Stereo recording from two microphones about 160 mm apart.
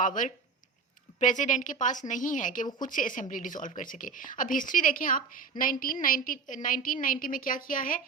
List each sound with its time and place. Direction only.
0.0 s a woman's voice: 55° left (ahead or behind)